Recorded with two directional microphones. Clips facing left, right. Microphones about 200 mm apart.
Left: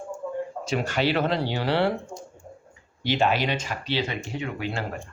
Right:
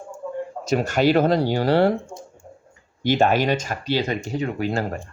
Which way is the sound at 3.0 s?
45° right (ahead or behind).